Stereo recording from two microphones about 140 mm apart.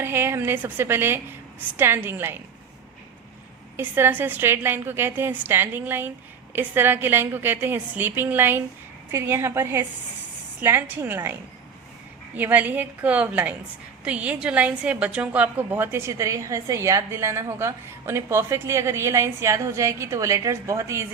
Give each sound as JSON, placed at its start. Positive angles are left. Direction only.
{"t": 0.0, "sound": "a woman's voice", "side_deg": -15}
{"t": 3.8, "sound": "a woman's voice", "side_deg": -15}